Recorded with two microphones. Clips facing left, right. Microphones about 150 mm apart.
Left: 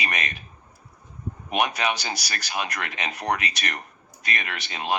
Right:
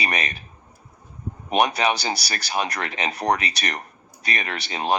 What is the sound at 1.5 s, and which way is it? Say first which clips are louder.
Speech: right 4 dB; 35° right (ahead or behind).